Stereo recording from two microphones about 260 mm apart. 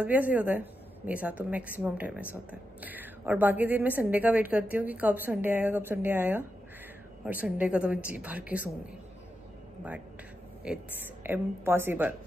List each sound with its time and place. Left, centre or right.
0.0 s a woman's voice: centre
10.6 s a woman's voice: centre